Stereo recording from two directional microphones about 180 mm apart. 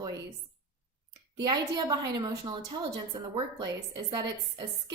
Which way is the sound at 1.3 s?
25° right (ahead or behind).